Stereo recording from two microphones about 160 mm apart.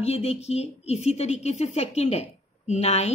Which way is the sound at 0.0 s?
40° left (ahead or behind).